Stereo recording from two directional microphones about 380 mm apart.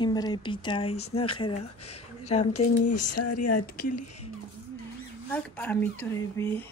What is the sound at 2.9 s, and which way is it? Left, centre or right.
Speech, left.